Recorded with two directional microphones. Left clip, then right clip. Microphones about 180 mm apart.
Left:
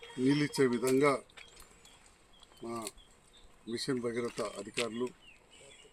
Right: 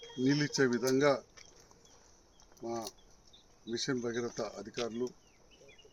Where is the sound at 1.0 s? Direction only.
20° right (ahead or behind).